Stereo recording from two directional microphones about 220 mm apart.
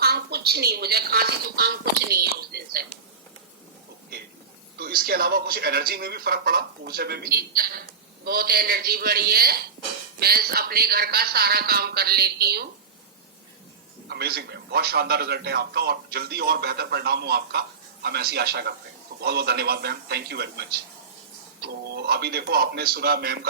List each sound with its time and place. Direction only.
0.0 s speech: 45° right (ahead or behind)
2.1 s a sound: 45° right (ahead or behind)
4.8 s speech: 45° right (ahead or behind)
14.1 s speech: 45° right (ahead or behind)